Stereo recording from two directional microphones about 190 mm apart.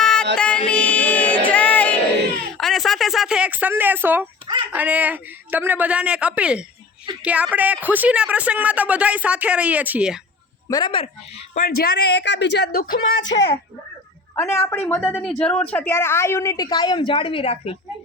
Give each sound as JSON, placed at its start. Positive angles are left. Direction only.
{"t": 0.0, "sound": "music", "side_deg": 5}
{"t": 0.3, "sound": "a sound", "side_deg": 5}
{"t": 2.6, "sound": "speech", "side_deg": 0}
{"t": 10.7, "sound": "speech", "side_deg": 20}
{"t": 11.5, "sound": "speech", "side_deg": 50}
{"t": 13.1, "sound": "speech", "side_deg": 85}
{"t": 14.3, "sound": "a woman's voice", "side_deg": 15}